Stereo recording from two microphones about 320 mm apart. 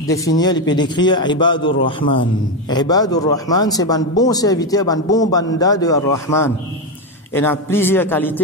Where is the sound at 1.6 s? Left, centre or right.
Left.